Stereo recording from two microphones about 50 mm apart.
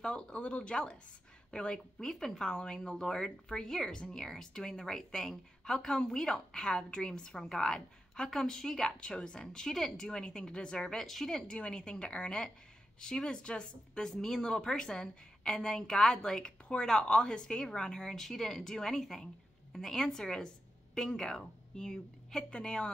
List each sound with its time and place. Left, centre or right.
0.0 s a woman's voice: centre
11.1 s speech: centre
11.3 s a woman's voice: centre